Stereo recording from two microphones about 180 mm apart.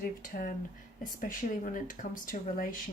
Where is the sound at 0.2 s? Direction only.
50° left (ahead or behind).